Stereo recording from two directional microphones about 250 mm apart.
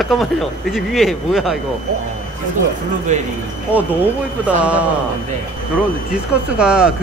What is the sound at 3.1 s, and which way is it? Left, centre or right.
Speech, right.